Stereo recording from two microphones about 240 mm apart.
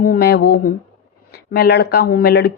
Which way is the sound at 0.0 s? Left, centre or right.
Left.